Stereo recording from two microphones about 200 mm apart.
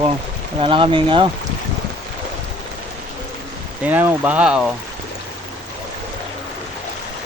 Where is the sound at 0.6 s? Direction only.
25° right (ahead or behind).